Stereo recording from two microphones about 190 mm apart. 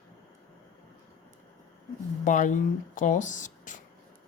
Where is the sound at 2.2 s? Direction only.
40° left (ahead or behind).